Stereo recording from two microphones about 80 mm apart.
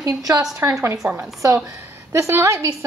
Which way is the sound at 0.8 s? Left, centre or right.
Right.